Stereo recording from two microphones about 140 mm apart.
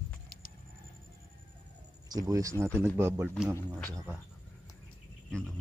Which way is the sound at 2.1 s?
25° right (ahead or behind).